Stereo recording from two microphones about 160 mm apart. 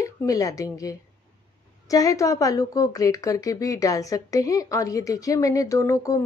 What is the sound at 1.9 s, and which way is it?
Speech, 20° left (ahead or behind).